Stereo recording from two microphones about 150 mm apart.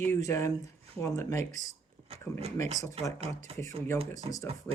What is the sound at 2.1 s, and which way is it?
Speech, 40° right (ahead or behind).